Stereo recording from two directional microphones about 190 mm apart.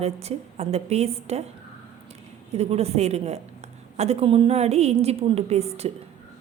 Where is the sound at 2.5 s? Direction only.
35° right (ahead or behind).